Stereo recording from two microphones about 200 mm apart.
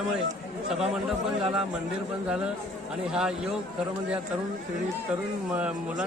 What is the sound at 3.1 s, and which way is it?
Speech, 5° right (ahead or behind).